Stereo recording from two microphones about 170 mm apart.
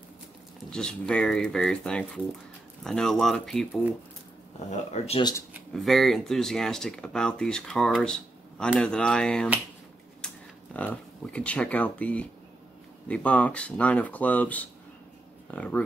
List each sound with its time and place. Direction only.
0.7 s speech: 5° left (ahead or behind)
4.6 s speech: 40° left (ahead or behind)
5.7 s speech: centre (ahead or behind)